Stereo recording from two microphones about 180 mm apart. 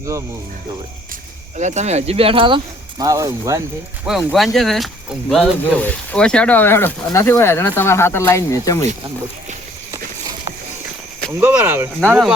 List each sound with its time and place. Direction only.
0.0 s speech: 15° right (ahead or behind)
1.5 s speech: 40° right (ahead or behind)
3.0 s speech: 20° right (ahead or behind)
4.0 s speech: 5° right (ahead or behind); by 8.8 s 15° left (ahead or behind)
11.3 s speech: 10° right (ahead or behind)